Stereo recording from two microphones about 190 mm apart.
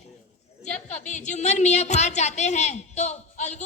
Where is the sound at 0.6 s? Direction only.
40° left (ahead or behind).